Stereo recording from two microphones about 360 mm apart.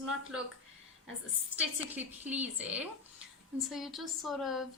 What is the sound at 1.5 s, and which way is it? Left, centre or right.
A woman's voice, centre.